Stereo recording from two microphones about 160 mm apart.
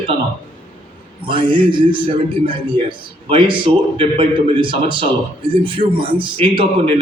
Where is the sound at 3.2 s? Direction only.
35° right (ahead or behind).